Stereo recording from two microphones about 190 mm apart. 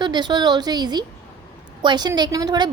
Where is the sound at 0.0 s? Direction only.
25° right (ahead or behind).